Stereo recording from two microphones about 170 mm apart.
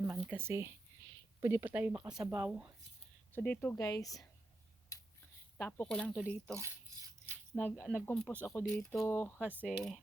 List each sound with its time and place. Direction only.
0.1 s speech: 15° right (ahead or behind)
3.3 s speech: 10° left (ahead or behind)
4.9 s finger snapping: 20° left (ahead or behind)
5.5 s speech: 10° left (ahead or behind)
6.5 s speech: 15° right (ahead or behind)
7.8 s speech: 5° right (ahead or behind)
8.0 s speech: 5° left (ahead or behind)
9.6 s speech: centre (ahead or behind)